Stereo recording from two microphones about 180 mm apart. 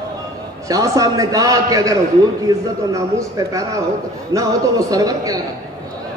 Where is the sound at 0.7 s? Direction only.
20° right (ahead or behind).